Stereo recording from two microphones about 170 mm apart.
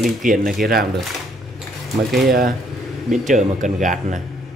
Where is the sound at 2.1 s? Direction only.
60° right (ahead or behind).